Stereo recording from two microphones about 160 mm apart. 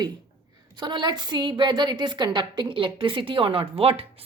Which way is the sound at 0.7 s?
30° right (ahead or behind).